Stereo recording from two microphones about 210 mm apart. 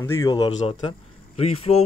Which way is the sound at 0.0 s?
20° left (ahead or behind).